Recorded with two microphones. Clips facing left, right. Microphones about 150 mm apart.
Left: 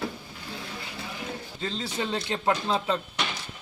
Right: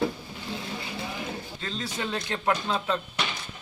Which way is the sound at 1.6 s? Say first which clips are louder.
Left 3 dB; 25° left (ahead or behind).